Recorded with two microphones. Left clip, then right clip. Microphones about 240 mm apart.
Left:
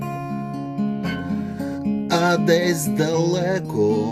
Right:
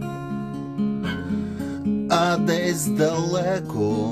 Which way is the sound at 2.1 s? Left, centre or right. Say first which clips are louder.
Left 3 dB; centre.